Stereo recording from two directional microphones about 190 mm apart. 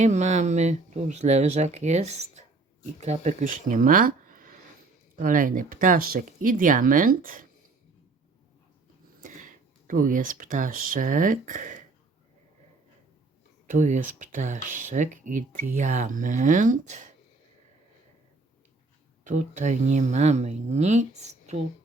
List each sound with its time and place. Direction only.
0.0 s speech: 35° right (ahead or behind)
9.2 s speech: 45° right (ahead or behind)
13.7 s speech: 40° right (ahead or behind)
19.2 s speech: 40° right (ahead or behind)